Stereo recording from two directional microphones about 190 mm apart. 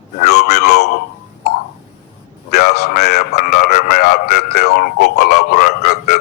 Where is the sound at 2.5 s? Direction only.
55° left (ahead or behind).